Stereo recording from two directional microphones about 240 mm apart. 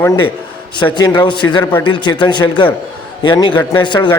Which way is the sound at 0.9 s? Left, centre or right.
Centre.